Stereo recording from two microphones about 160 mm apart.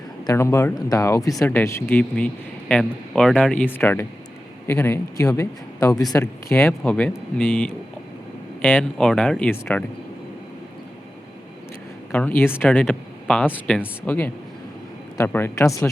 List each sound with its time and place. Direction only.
0.3 s speech: 20° left (ahead or behind)
12.1 s speech: 10° left (ahead or behind)